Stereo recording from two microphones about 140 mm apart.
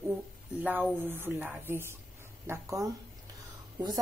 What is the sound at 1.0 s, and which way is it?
Speech, 15° right (ahead or behind).